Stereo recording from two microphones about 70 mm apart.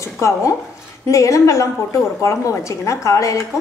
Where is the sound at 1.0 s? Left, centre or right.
Left.